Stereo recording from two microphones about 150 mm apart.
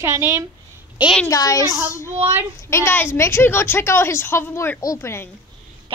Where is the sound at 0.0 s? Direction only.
15° right (ahead or behind).